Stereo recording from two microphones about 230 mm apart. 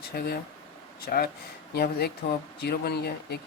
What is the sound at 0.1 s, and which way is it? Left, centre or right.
Speech, left.